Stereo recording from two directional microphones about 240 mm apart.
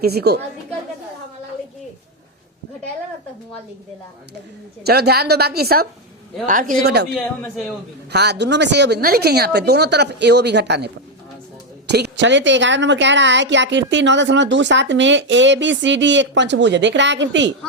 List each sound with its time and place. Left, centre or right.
0.0 s a woman's voice: right
4.8 s a woman's voice: right
8.1 s a woman's voice: right